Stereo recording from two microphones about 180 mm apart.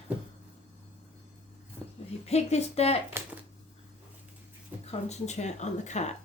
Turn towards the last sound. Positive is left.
turn(degrees=40)  # may be behind; listen again after turning